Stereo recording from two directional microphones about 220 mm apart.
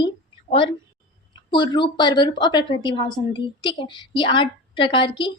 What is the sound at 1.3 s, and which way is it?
A woman's voice, 20° left (ahead or behind).